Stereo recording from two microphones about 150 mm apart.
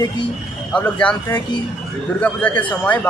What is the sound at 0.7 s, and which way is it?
Speech, 10° left (ahead or behind).